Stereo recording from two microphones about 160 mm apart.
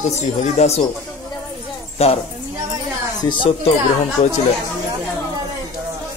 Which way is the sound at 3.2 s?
30° left (ahead or behind).